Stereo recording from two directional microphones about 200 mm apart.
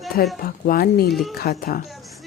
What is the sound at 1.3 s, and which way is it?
Speech, 50° left (ahead or behind).